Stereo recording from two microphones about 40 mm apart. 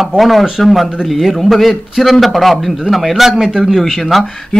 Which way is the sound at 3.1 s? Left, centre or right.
Centre.